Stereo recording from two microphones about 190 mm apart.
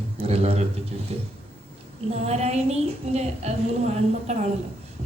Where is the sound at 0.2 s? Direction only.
30° right (ahead or behind).